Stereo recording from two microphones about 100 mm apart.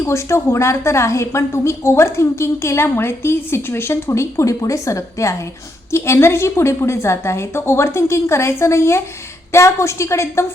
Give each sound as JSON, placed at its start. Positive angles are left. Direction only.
{"t": 0.0, "sound": "a woman's voice", "side_deg": 30}